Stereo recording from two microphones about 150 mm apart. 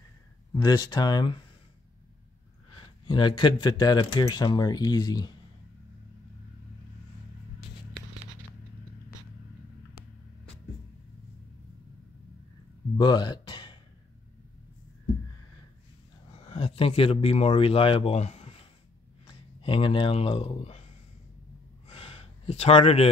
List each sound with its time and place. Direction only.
0.6 s speech: 25° left (ahead or behind)
3.1 s speech: 30° left (ahead or behind)
12.9 s a sound: 30° left (ahead or behind)
16.3 s speech: 40° left (ahead or behind)
21.8 s gasp: 40° left (ahead or behind)